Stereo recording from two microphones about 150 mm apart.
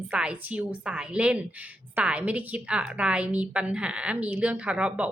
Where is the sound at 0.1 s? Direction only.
10° right (ahead or behind).